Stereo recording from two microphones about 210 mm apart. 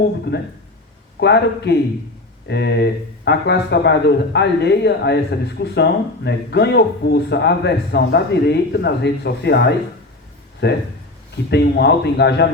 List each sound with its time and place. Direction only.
0.3 s speech: 50° left (ahead or behind)